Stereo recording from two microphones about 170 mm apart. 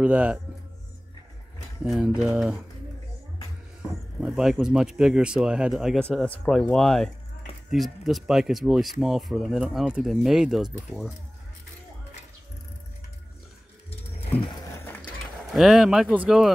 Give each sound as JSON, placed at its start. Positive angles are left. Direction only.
{"t": 0.0, "sound": "speech", "side_deg": -10}
{"t": 1.9, "sound": "speech", "side_deg": -5}
{"t": 4.2, "sound": "speech", "side_deg": -5}
{"t": 14.2, "sound": "a sound", "side_deg": 30}
{"t": 15.0, "sound": "speech", "side_deg": 0}